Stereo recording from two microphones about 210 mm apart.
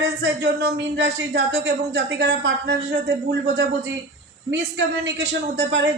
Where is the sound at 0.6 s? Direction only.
50° right (ahead or behind).